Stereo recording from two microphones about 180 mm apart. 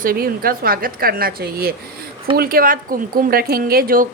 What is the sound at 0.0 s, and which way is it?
A woman's voice, 55° right (ahead or behind).